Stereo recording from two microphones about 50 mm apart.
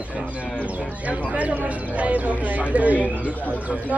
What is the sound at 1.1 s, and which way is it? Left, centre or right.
Speech, right.